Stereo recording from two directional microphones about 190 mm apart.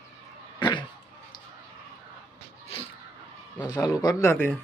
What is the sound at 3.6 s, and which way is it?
Speech, 20° left (ahead or behind).